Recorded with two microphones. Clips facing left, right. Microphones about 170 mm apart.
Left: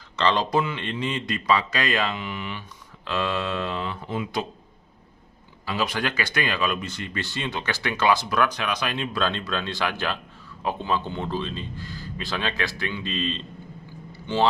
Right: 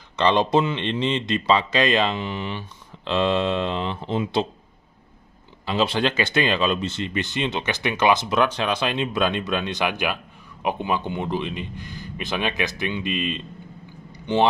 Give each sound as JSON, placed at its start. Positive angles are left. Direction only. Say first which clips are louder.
{"t": 0.1, "sound": "speech", "louder": "right 4 dB", "side_deg": -20}
{"t": 5.7, "sound": "speech", "louder": "right 5 dB", "side_deg": -25}
{"t": 14.1, "sound": "vehicle", "louder": "right 4 dB", "side_deg": -20}